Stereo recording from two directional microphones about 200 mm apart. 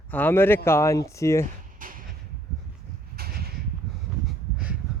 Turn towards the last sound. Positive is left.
turn(degrees=-50)  # may be behind; listen again after turning